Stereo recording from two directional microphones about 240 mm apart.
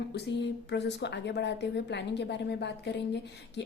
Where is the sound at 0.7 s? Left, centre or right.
Left.